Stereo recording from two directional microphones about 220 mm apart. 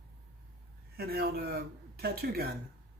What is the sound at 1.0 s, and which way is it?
Speech, 45° right (ahead or behind).